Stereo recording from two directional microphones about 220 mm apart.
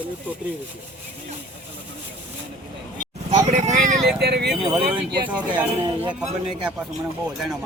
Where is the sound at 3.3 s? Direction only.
30° right (ahead or behind).